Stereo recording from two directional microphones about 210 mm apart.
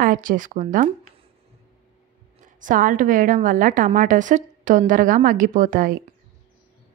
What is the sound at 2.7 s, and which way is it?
Speech, 40° right (ahead or behind).